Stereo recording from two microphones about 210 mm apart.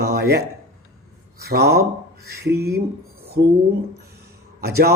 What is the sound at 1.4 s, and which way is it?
Speech, 50° right (ahead or behind).